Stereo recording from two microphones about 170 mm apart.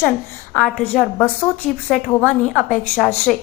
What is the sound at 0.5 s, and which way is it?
A woman's voice, 5° left (ahead or behind).